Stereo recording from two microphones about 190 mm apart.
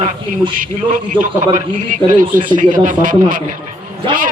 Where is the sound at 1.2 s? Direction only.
45° right (ahead or behind).